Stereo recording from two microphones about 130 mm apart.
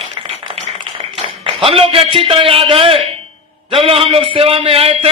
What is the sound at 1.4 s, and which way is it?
A man's voice, 45° right (ahead or behind).